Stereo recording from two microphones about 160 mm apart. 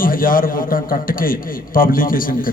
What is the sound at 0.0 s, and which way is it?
A man's voice, 60° left (ahead or behind).